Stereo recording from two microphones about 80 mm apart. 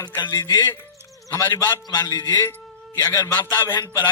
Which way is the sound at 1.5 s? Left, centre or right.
Left.